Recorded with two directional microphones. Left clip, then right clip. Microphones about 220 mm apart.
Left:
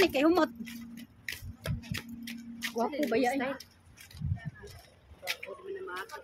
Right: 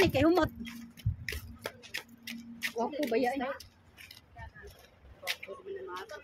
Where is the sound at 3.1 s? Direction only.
15° left (ahead or behind).